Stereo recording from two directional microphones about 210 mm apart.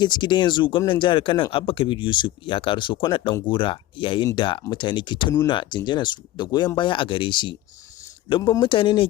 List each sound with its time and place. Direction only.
0.0 s speech: 20° left (ahead or behind)